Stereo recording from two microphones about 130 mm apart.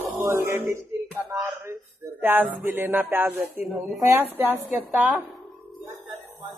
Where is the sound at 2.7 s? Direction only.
15° right (ahead or behind).